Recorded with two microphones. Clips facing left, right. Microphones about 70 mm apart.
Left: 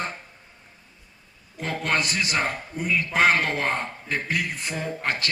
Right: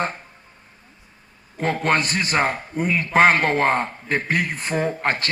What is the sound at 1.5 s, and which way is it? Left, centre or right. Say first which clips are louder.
A man's voice: right 5 dB; right.